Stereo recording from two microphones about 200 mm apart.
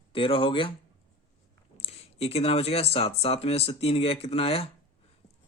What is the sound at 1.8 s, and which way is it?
Speech, 30° left (ahead or behind).